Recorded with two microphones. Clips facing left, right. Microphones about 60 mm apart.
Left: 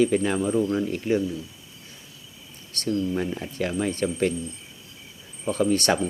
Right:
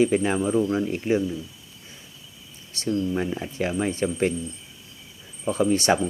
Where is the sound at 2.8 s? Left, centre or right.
Centre.